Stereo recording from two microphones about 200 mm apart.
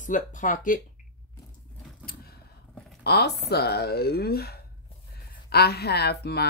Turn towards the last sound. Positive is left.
turn(degrees=55)  # may be behind; listen again after turning